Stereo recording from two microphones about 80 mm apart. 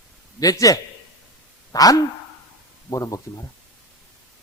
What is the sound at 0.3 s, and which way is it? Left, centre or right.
A man's voice, left.